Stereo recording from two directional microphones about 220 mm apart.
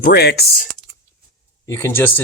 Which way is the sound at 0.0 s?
45° left (ahead or behind).